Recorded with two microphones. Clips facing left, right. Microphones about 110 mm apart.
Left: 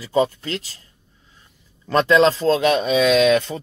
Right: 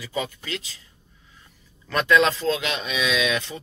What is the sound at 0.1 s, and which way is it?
Speech, 35° left (ahead or behind).